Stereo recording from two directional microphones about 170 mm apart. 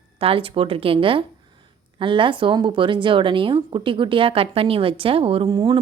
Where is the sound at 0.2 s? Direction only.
35° right (ahead or behind).